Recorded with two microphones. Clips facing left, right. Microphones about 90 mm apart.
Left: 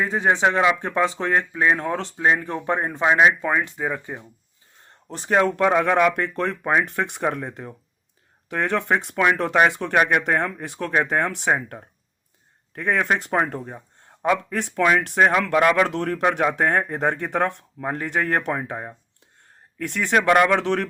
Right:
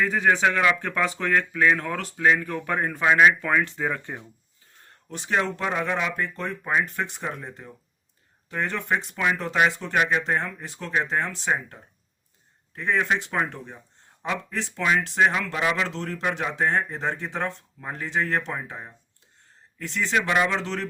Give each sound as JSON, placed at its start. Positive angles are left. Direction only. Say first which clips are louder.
{"t": 0.0, "sound": "speech", "louder": "left 1 dB", "side_deg": 25}
{"t": 5.0, "sound": "speech", "louder": "left 6 dB", "side_deg": 40}